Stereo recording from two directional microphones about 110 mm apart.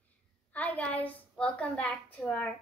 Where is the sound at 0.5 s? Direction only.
15° left (ahead or behind).